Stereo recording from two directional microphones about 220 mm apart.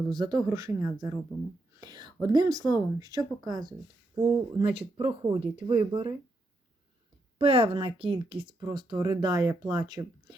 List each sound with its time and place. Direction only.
0.1 s speech: 15° right (ahead or behind)
7.3 s speech: 25° right (ahead or behind)